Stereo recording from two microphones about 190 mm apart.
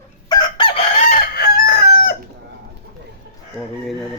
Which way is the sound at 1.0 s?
50° left (ahead or behind).